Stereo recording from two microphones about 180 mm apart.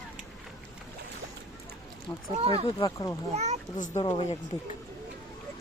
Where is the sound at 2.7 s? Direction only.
25° left (ahead or behind).